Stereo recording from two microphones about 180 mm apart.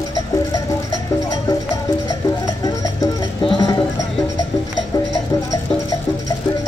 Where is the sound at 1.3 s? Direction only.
20° left (ahead or behind).